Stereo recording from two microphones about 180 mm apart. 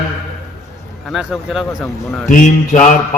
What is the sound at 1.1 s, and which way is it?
Speech, centre (ahead or behind).